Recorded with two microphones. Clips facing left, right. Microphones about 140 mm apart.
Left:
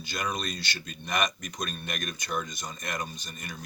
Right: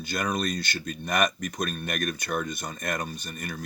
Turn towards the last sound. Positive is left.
turn(degrees=-55)  # may be behind; listen again after turning